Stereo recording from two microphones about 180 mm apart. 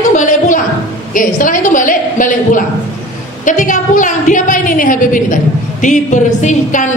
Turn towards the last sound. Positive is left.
turn(degrees=45)  # may be behind; listen again after turning